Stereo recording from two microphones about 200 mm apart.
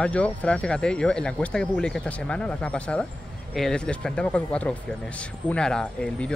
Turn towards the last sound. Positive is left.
turn(degrees=5)  # may be behind; listen again after turning